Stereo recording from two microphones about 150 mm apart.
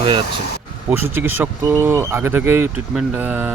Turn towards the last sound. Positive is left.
turn(degrees=-10)  # may be behind; listen again after turning